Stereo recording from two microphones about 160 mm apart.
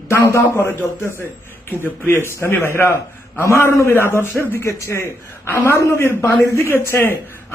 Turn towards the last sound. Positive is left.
turn(degrees=15)  # may be behind; listen again after turning